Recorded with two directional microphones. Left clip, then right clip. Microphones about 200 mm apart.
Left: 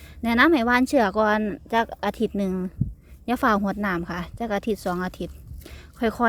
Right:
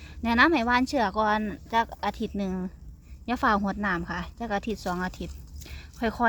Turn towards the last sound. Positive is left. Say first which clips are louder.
# left 3 dB
turn(degrees=30)  # may be behind; listen again after turning